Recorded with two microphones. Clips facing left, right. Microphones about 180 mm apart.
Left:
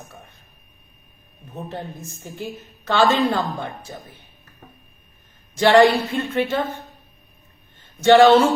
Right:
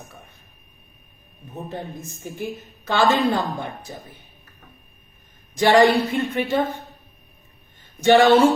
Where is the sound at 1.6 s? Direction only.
15° right (ahead or behind).